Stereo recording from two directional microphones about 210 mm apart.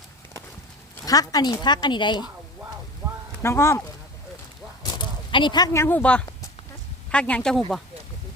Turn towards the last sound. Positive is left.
turn(degrees=5)  # may be behind; listen again after turning